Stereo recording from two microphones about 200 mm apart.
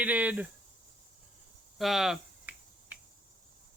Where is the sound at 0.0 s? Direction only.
10° right (ahead or behind).